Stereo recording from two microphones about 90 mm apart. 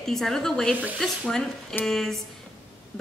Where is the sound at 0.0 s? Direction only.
5° left (ahead or behind).